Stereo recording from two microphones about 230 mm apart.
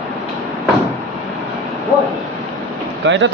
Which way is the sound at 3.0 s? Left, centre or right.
Right.